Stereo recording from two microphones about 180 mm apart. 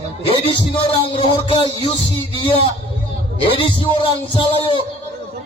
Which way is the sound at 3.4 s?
30° left (ahead or behind).